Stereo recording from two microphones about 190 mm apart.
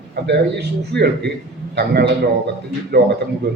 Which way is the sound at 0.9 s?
65° right (ahead or behind).